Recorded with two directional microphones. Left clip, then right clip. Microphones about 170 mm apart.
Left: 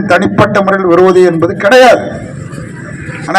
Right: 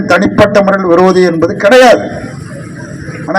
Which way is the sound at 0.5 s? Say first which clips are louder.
Right 1 dB; 40° right (ahead or behind).